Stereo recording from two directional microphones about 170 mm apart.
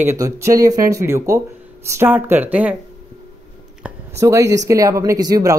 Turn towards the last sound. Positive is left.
turn(degrees=-20)  # may be behind; listen again after turning